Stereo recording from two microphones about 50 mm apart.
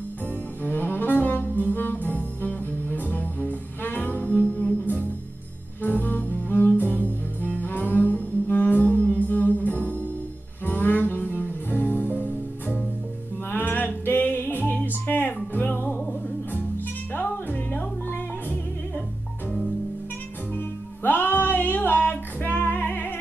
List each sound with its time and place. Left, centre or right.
0.7 s saxophone: left
1.6 s music: left
5.8 s music: left
20.5 s music: left